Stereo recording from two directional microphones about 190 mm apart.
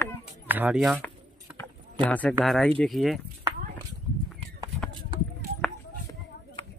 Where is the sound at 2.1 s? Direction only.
5° left (ahead or behind).